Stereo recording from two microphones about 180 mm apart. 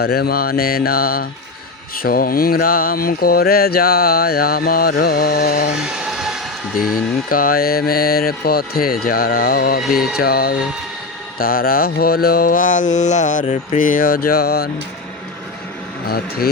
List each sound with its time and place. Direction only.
0.0 s mantra: 60° left (ahead or behind)
6.0 s vehicle: 5° right (ahead or behind)
6.9 s mantra: 55° left (ahead or behind)
16.0 s mantra: 60° left (ahead or behind)